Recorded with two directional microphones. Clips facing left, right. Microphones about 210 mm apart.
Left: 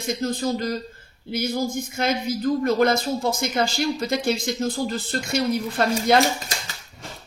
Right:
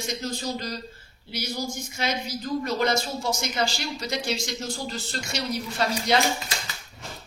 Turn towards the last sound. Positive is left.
turn(degrees=50)  # may be behind; listen again after turning